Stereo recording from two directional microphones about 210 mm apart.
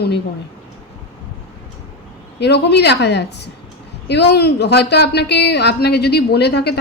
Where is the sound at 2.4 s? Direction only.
55° left (ahead or behind).